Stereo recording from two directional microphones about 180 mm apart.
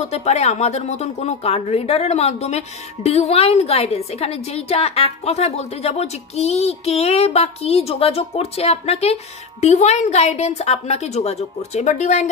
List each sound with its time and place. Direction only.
0.1 s speech: 35° left (ahead or behind)